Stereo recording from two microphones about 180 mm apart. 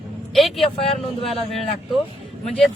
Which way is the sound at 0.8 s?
35° left (ahead or behind).